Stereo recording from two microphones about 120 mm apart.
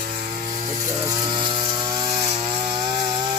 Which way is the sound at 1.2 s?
45° right (ahead or behind).